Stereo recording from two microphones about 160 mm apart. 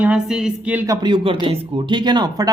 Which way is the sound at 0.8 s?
25° right (ahead or behind).